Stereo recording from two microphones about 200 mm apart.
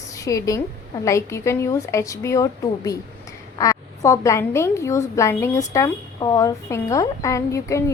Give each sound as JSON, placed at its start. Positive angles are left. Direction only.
{"t": 0.3, "sound": "a woman's voice", "side_deg": 15}